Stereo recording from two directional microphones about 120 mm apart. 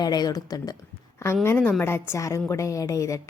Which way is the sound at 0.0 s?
35° left (ahead or behind).